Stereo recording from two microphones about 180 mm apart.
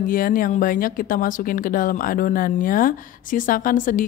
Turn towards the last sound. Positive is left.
turn(degrees=50)  # may be behind; listen again after turning